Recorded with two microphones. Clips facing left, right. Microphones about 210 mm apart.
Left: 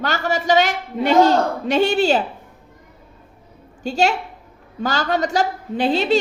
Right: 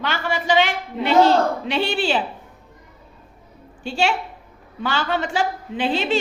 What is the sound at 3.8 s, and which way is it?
A woman's voice, 40° left (ahead or behind).